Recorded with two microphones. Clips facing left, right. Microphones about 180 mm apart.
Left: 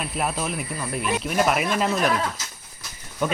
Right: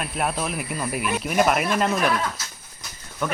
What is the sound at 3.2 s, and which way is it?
Speech, 20° left (ahead or behind).